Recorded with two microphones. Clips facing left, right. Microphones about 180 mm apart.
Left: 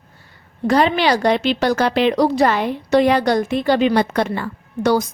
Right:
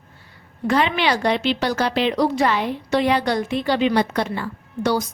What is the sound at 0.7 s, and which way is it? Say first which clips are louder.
A woman's voice: left 4 dB; 40° left (ahead or behind).